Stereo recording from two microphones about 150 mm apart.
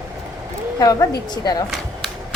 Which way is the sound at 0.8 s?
25° left (ahead or behind).